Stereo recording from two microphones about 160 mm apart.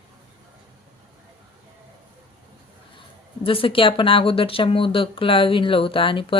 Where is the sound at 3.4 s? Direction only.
35° left (ahead or behind).